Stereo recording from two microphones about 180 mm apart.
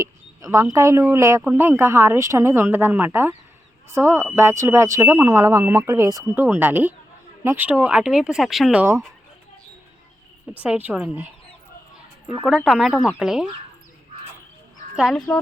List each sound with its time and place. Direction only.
0.0 s speech: 20° right (ahead or behind)
10.5 s speech: 10° right (ahead or behind)
12.5 s speech: 5° right (ahead or behind)
14.9 s speech: centre (ahead or behind)